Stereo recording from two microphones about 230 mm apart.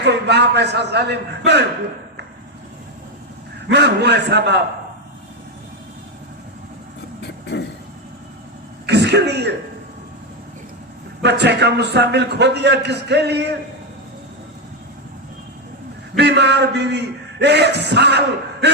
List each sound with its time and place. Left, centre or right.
0.0 s a man's voice: right
3.7 s a man's voice: right
7.2 s a sound: left
8.9 s speech: right
11.2 s a man's voice: right
16.1 s a man's voice: right